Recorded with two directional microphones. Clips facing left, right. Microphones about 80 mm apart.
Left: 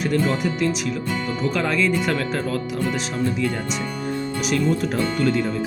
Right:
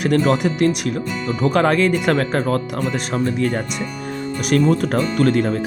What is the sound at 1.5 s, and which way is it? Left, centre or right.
Speech, right.